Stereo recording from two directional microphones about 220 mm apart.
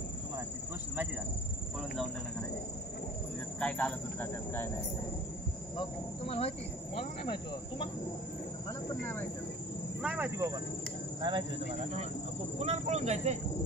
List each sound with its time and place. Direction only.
3.5 s speech: 5° left (ahead or behind)
5.8 s speech: 25° left (ahead or behind)
10.0 s speech: 10° right (ahead or behind)
12.5 s speech: 30° right (ahead or behind)